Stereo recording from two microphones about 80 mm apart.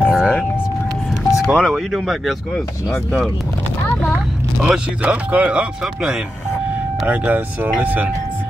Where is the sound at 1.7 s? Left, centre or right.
Centre.